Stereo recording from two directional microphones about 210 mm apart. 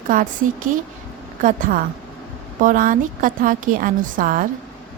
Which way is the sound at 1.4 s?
40° right (ahead or behind).